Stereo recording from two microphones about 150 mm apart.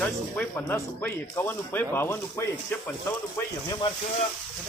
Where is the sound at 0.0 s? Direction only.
15° left (ahead or behind).